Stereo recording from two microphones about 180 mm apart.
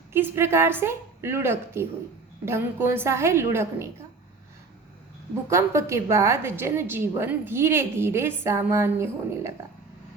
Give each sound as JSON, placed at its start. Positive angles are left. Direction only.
{"t": 0.1, "sound": "a woman's voice", "side_deg": -15}
{"t": 5.5, "sound": "a woman's voice", "side_deg": -15}